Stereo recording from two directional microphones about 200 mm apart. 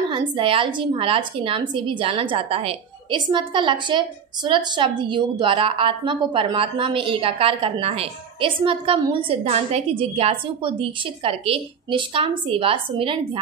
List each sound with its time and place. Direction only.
0.4 s a woman's voice: 25° right (ahead or behind)